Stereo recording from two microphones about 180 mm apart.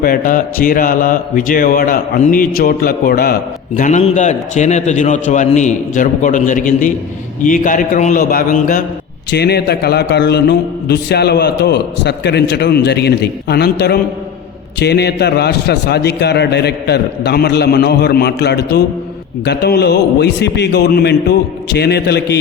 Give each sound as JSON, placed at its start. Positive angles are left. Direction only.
{"t": 0.0, "sound": "mantra", "side_deg": 50}
{"t": 3.8, "sound": "mantra", "side_deg": 40}
{"t": 9.3, "sound": "a man's voice", "side_deg": 65}